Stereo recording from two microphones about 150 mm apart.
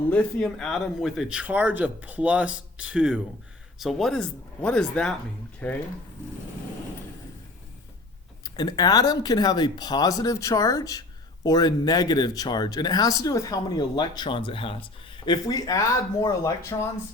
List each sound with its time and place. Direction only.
0.1 s speech: 10° left (ahead or behind)
8.4 s speech: 25° left (ahead or behind)